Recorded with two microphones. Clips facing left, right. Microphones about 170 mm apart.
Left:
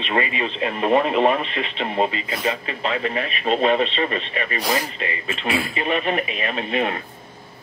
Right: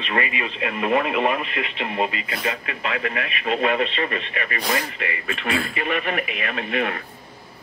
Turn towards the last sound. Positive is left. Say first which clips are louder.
# left 2 dB
turn(degrees=25)  # may be behind; listen again after turning